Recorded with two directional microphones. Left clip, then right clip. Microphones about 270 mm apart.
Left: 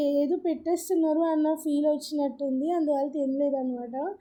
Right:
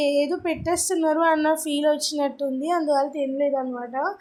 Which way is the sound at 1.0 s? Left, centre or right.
Right.